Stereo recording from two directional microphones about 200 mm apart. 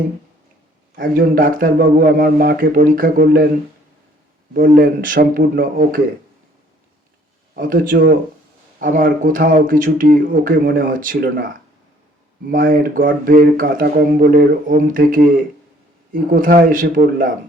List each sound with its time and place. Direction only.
0.9 s speech: 45° right (ahead or behind)
4.5 s speech: 45° right (ahead or behind)
7.5 s speech: 45° right (ahead or behind)
12.5 s speech: 45° right (ahead or behind)